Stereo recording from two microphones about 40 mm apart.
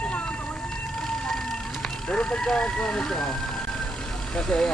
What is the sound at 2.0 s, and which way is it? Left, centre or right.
Speech, left.